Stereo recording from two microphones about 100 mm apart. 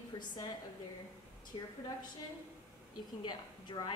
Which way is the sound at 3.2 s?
45° left (ahead or behind).